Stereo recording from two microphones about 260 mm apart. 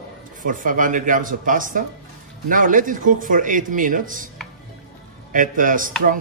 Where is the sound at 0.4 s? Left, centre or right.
Right.